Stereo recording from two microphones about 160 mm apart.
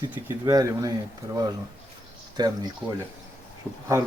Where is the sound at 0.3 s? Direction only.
20° right (ahead or behind).